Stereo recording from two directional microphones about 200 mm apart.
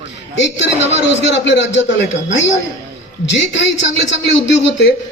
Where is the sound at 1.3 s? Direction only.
60° left (ahead or behind).